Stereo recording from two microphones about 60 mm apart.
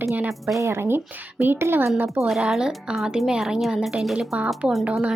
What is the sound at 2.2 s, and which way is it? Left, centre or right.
A woman's voice, centre.